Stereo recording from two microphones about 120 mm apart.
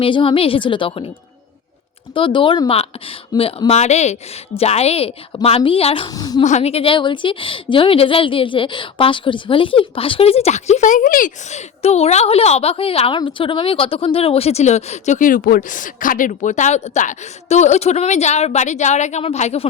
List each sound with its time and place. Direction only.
0.0 s a woman's voice: 45° left (ahead or behind)
2.1 s a woman's voice: 45° left (ahead or behind)
3.3 s speech: 30° left (ahead or behind)
3.7 s a woman's voice: 65° left (ahead or behind); by 6.1 s 50° left (ahead or behind)
6.1 s a woman's voice: 30° left (ahead or behind)
6.4 s a woman's voice: 70° left (ahead or behind)
15.7 s a woman's voice: 90° left; by 19.6 s 65° left (ahead or behind)